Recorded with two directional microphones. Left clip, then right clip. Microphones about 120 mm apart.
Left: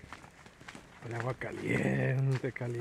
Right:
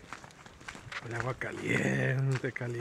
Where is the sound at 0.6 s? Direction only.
20° left (ahead or behind).